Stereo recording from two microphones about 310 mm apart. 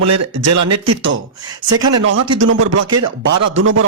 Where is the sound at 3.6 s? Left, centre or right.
Right.